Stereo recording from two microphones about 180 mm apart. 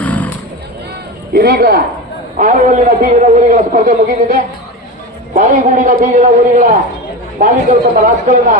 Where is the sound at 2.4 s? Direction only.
45° right (ahead or behind).